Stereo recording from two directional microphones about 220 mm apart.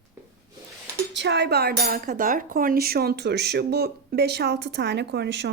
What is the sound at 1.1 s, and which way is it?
Speech, 50° right (ahead or behind).